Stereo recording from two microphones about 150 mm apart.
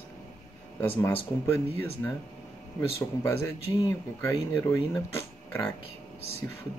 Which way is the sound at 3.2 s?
20° left (ahead or behind).